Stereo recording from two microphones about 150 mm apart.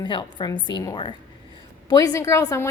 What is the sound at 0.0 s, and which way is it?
A woman's voice, 30° left (ahead or behind).